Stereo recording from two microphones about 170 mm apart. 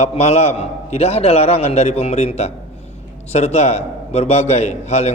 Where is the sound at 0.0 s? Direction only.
40° left (ahead or behind).